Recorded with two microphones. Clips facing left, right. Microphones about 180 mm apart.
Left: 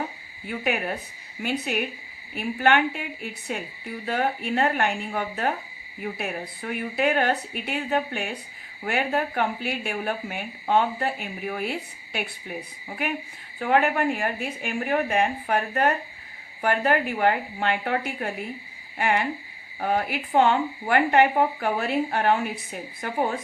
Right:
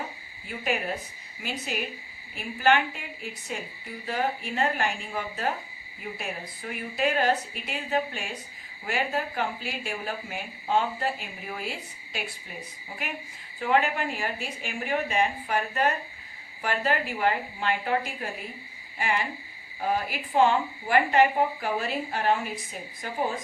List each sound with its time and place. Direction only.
0.6 s speech: 60° left (ahead or behind)
4.0 s speech: 65° left (ahead or behind)
13.6 s speech: 60° left (ahead or behind)